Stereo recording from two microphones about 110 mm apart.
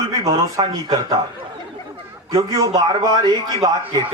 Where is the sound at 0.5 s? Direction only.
40° right (ahead or behind).